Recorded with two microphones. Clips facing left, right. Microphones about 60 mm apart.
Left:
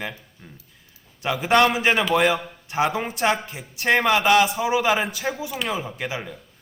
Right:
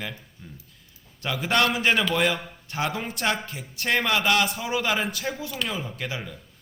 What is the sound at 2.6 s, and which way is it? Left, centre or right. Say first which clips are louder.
A man's voice: left 5 dB; left.